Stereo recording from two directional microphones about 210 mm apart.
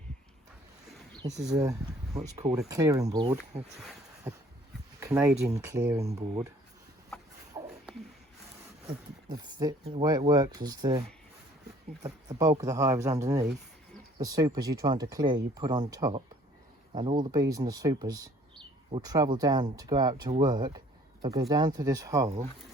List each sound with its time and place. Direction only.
2.1 s speech: 20° right (ahead or behind)
3.5 s speech: 30° right (ahead or behind)
4.3 s speech: 10° right (ahead or behind)
7.6 s a sound: 15° right (ahead or behind)
8.9 s speech: 20° right (ahead or behind)
12.0 s speech: 15° right (ahead or behind)